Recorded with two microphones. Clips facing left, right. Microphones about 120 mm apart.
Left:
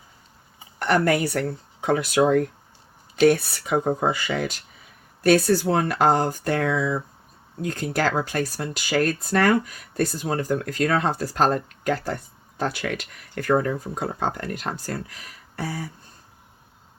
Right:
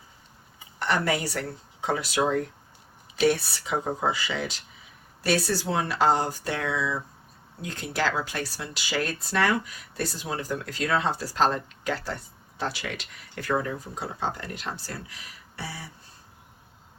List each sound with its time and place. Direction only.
0.8 s speech: 55° left (ahead or behind)